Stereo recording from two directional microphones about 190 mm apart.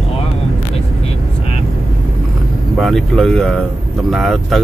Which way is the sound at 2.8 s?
Centre (ahead or behind).